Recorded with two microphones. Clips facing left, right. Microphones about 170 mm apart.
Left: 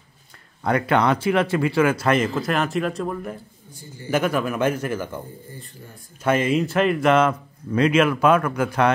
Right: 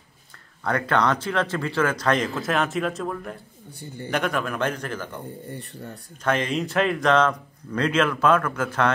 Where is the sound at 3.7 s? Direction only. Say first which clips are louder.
Right 1 dB; 60° right (ahead or behind).